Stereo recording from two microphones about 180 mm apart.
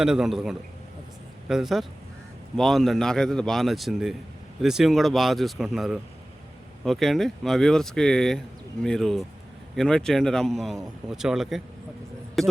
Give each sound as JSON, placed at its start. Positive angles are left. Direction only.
{"t": 0.0, "sound": "a man's voice", "side_deg": -5}